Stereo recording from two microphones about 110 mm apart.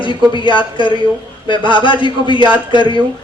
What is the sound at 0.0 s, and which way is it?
A woman's voice, 50° left (ahead or behind).